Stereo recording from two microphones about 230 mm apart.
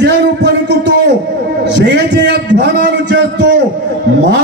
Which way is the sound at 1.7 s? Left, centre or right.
Right.